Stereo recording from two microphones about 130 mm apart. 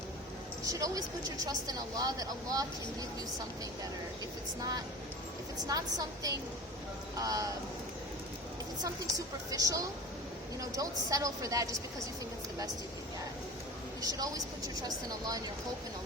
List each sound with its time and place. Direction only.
0.6 s speech: 25° right (ahead or behind)
5.6 s speech: 25° right (ahead or behind)
8.8 s speech: 25° right (ahead or behind)
14.0 s speech: 30° right (ahead or behind)